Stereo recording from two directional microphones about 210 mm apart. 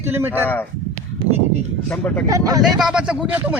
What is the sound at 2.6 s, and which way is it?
Speech, centre (ahead or behind).